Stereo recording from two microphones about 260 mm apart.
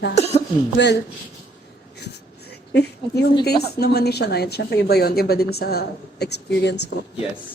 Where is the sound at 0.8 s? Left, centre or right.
Left.